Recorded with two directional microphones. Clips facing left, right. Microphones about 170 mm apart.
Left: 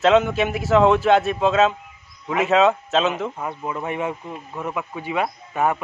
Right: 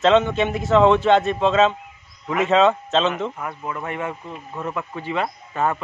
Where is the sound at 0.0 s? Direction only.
5° left (ahead or behind).